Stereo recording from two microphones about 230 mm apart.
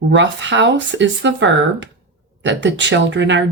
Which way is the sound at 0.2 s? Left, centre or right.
Right.